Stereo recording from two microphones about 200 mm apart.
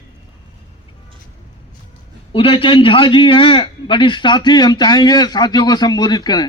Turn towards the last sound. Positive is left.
turn(degrees=20)  # may be behind; listen again after turning